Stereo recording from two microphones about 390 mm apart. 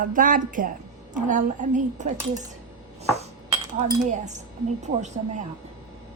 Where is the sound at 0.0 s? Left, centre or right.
Right.